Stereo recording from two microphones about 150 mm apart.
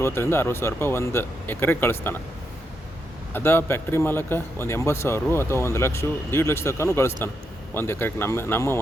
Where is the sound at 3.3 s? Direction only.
15° left (ahead or behind).